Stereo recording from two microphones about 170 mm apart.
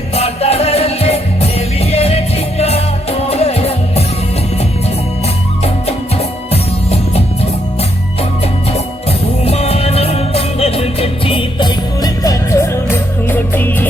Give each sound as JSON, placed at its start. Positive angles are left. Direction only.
{"t": 0.2, "sound": "music", "side_deg": 35}
{"t": 6.5, "sound": "music", "side_deg": 35}
{"t": 9.4, "sound": "music", "side_deg": 35}